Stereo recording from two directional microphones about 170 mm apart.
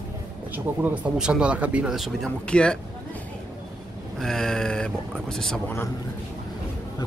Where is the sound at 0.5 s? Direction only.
10° right (ahead or behind); by 2.8 s 5° left (ahead or behind).